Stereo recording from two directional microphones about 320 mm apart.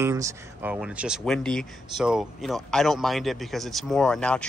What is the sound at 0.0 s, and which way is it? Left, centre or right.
Speech, centre.